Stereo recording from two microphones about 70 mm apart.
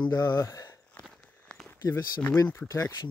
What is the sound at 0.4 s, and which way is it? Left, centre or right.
Speech, left.